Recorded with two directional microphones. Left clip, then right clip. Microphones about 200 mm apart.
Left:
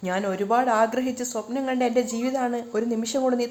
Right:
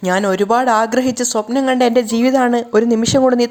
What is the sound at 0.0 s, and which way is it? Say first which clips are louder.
Speech: right 11 dB; 40° right (ahead or behind).